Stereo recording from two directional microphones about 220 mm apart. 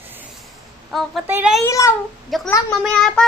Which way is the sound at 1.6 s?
15° left (ahead or behind).